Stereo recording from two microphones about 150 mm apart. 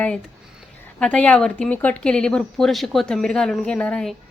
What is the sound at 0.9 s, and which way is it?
A woman's voice, 5° left (ahead or behind).